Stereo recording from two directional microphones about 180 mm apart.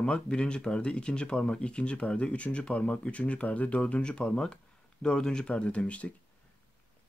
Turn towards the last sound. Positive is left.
turn(degrees=5)  # may be behind; listen again after turning